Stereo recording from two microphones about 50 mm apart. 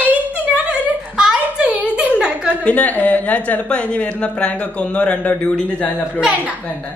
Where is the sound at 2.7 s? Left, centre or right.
Left.